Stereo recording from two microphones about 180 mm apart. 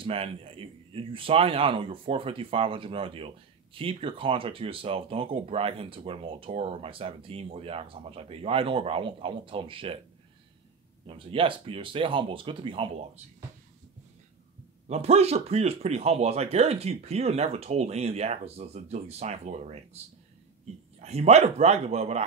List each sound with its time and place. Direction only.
0.0 s speech: 30° right (ahead or behind)
11.1 s speech: 30° right (ahead or behind)
14.9 s speech: 35° right (ahead or behind)
21.0 s speech: 35° right (ahead or behind)